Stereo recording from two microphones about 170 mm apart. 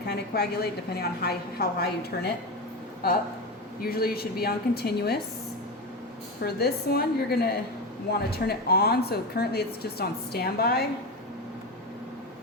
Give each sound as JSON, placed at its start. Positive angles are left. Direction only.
{"t": 0.1, "sound": "a woman's voice", "side_deg": 70}
{"t": 3.8, "sound": "a woman's voice", "side_deg": 65}
{"t": 6.4, "sound": "a woman's voice", "side_deg": 70}